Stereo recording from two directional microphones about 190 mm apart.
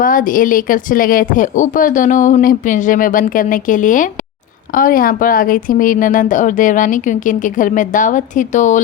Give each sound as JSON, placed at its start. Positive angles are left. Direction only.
{"t": 0.0, "sound": "speech", "side_deg": 45}